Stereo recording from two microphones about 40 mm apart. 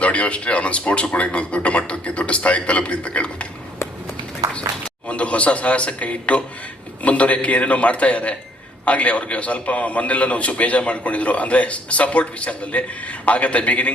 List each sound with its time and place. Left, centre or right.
0.0 s a man's voice: left
5.0 s a man's voice: left